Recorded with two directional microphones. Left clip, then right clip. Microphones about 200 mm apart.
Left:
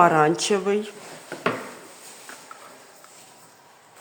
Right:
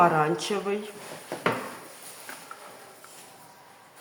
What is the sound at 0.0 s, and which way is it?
Speech, 45° left (ahead or behind).